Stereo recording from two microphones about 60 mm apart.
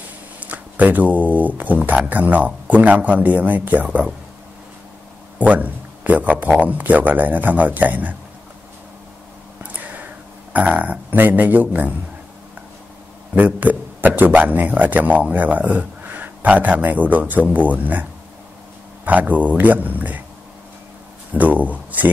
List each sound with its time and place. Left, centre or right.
0.4 s a man's voice: right
5.4 s a man's voice: right
9.6 s a sound: right
10.5 s a man's voice: right
13.3 s a man's voice: right
19.0 s a man's voice: right
21.3 s speech: right